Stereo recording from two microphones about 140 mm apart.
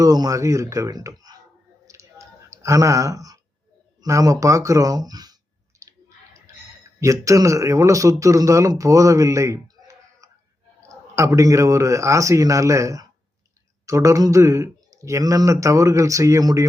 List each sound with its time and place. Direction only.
0.0 s a man's voice: 25° right (ahead or behind)
1.8 s clicking: 25° right (ahead or behind)
4.0 s a man's voice: 25° right (ahead or behind)
6.5 s a sound: 20° right (ahead or behind)
7.0 s a man's voice: 25° right (ahead or behind)